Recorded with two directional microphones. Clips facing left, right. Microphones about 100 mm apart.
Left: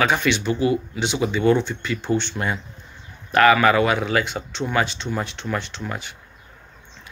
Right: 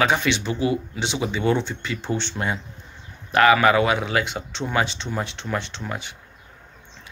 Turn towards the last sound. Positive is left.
turn(degrees=-25)  # may be behind; listen again after turning